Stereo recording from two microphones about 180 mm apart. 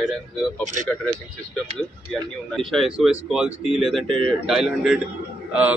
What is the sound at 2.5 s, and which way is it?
A man's voice, centre (ahead or behind).